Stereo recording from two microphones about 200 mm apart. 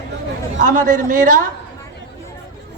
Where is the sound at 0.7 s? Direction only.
40° right (ahead or behind).